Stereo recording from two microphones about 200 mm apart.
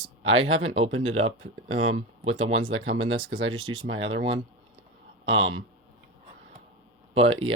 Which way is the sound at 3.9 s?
75° right (ahead or behind).